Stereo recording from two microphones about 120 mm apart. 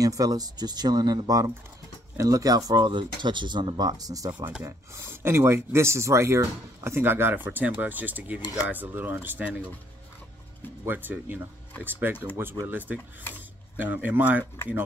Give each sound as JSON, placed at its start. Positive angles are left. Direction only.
{"t": 0.0, "sound": "speech", "side_deg": -30}
{"t": 10.9, "sound": "speech", "side_deg": -15}